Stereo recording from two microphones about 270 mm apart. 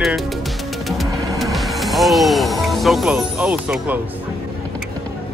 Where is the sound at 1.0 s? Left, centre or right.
Centre.